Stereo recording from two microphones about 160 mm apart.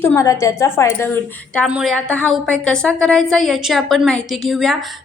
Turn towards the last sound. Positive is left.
turn(degrees=0)  # may be behind; listen again after turning